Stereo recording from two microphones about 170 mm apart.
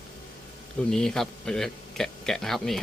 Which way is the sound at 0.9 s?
5° left (ahead or behind).